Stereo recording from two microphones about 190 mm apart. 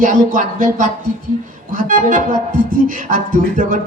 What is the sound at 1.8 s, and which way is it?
Speech, 45° right (ahead or behind).